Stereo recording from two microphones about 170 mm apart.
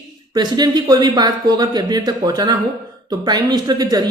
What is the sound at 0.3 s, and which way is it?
Speech, 25° right (ahead or behind).